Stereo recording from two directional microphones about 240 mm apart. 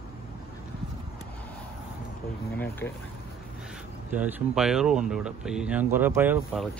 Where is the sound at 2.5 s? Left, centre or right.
Centre.